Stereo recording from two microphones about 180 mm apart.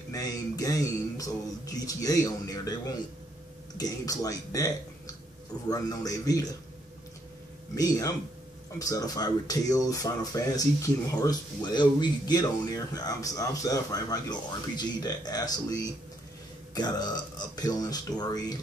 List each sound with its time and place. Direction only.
0.1 s speech: 20° left (ahead or behind)
7.7 s speech: 20° left (ahead or behind)